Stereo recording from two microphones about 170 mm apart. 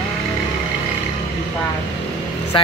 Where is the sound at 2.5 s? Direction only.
30° left (ahead or behind).